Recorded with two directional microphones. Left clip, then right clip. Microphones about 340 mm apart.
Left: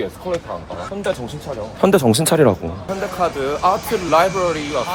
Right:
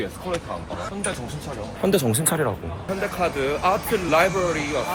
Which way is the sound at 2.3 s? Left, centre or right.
Left.